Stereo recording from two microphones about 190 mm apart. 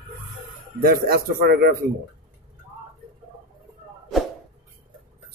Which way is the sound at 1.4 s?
50° right (ahead or behind).